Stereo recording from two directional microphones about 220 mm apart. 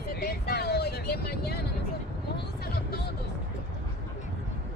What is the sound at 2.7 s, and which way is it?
Music, 45° left (ahead or behind).